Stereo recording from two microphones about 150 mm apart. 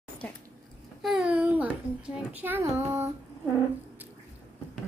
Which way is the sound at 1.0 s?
5° right (ahead or behind).